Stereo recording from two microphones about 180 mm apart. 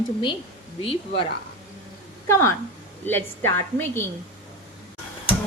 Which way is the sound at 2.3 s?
15° left (ahead or behind).